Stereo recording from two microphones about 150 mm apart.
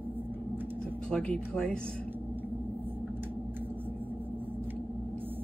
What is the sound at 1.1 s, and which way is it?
Speech, 5° left (ahead or behind).